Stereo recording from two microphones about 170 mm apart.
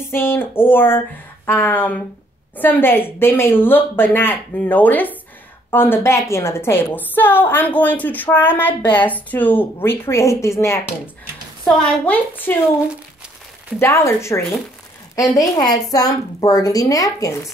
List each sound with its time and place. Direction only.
0.1 s a woman's voice: 15° left (ahead or behind)
13.7 s a woman's voice: 15° left (ahead or behind)